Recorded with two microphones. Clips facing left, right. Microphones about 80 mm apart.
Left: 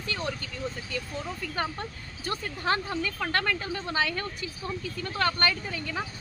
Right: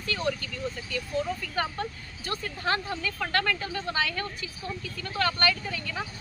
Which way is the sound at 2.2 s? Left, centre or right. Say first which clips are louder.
Left 1 dB; left.